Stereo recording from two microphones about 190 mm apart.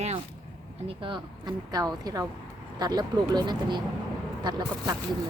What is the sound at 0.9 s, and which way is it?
Speech, 25° right (ahead or behind).